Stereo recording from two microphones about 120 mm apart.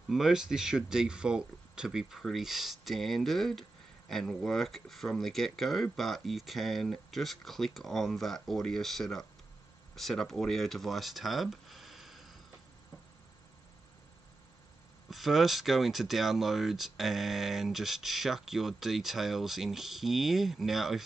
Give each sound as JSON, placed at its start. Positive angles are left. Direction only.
{"t": 0.1, "sound": "speech", "side_deg": -5}
{"t": 15.0, "sound": "speech", "side_deg": 0}